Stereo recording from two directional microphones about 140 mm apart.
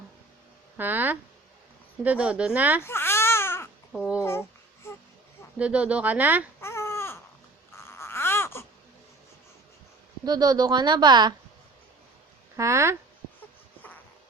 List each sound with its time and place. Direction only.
0.8 s speech: 15° right (ahead or behind)
2.8 s baby cry: 15° left (ahead or behind)
3.9 s speech: 5° right (ahead or behind)
4.2 s speech: 20° left (ahead or behind)
5.5 s speech: 10° right (ahead or behind)
6.6 s baby cry: 20° left (ahead or behind)
10.2 s speech: 30° right (ahead or behind)
12.5 s speech: 20° right (ahead or behind)